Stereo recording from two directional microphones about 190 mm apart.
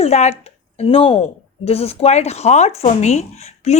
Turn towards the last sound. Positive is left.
turn(degrees=35)  # may be behind; listen again after turning